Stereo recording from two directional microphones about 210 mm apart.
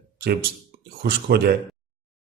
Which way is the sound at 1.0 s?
50° right (ahead or behind).